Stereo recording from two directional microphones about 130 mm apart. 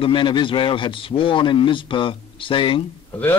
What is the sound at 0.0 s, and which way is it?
A man's voice, 40° left (ahead or behind).